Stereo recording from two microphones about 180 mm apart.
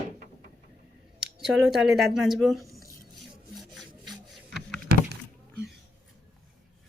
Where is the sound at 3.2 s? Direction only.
Centre (ahead or behind).